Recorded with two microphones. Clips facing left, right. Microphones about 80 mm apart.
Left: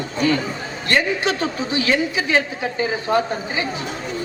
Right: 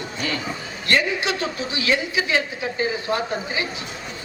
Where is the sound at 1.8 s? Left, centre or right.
Left.